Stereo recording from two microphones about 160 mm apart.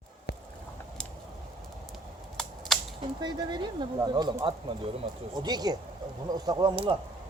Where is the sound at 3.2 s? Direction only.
25° right (ahead or behind).